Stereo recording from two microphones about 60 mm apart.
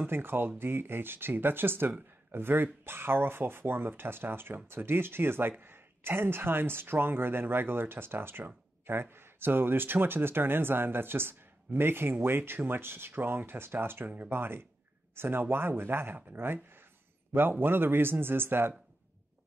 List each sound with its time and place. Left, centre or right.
0.0 s speech: right